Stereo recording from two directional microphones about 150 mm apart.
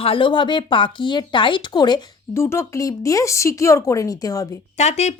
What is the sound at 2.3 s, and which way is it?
Speech, 15° left (ahead or behind).